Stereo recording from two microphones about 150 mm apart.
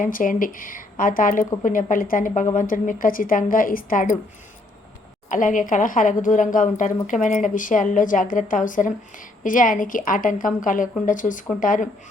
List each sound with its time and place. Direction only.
0.0 s a woman's voice: 65° left (ahead or behind)
5.3 s a woman's voice: 60° left (ahead or behind)